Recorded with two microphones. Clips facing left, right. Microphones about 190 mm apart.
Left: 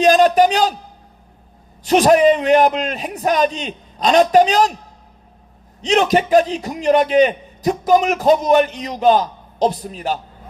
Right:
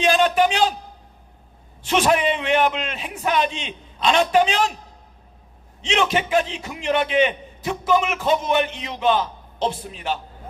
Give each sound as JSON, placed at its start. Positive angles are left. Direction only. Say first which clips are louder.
{"t": 0.0, "sound": "a sound", "louder": "left 6 dB", "side_deg": 40}
{"t": 1.8, "sound": "a man's voice", "louder": "left 7 dB", "side_deg": 40}
{"t": 5.8, "sound": "a man's voice", "louder": "left 6 dB", "side_deg": 40}